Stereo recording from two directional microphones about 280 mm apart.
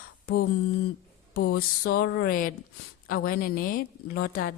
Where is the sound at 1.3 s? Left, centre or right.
Left.